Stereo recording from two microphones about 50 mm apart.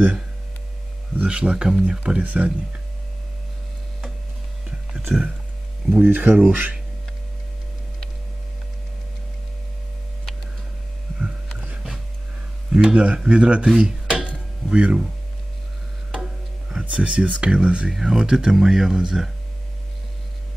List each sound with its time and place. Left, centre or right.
1.1 s speech: right
5.1 s speech: centre
5.9 s speech: right
12.7 s speech: right
13.7 s dishes: centre
14.7 s speech: right
16.8 s speech: right